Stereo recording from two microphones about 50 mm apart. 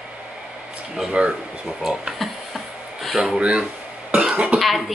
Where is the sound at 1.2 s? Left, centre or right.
Right.